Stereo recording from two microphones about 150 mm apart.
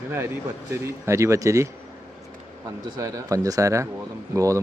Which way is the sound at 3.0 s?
20° right (ahead or behind).